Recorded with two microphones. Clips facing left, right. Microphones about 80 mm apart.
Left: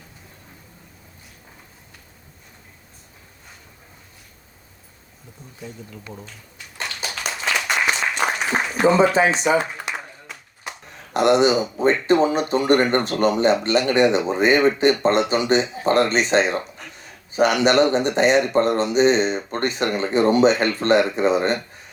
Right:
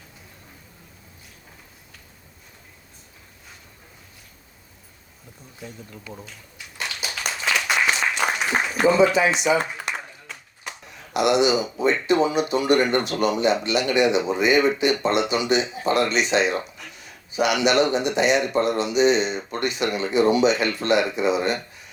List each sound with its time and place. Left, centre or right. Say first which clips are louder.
7.5 s applause: even; centre
9.0 s speech: left 1 dB; left
9.8 s a sound: left 1 dB; centre
11.1 s speech: left 3 dB; left